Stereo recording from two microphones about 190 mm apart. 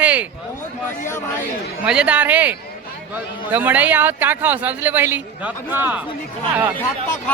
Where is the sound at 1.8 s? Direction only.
5° right (ahead or behind).